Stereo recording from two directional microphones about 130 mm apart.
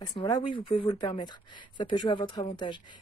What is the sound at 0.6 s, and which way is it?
Speech, 40° left (ahead or behind).